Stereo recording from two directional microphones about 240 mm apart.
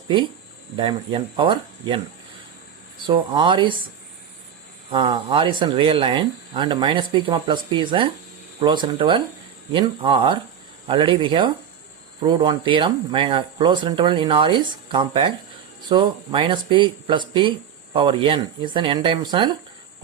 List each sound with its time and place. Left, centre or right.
0.8 s speech: right
3.1 s speech: centre
4.9 s speech: centre